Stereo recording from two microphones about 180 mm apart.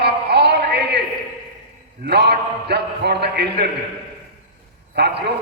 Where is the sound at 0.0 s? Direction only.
70° right (ahead or behind).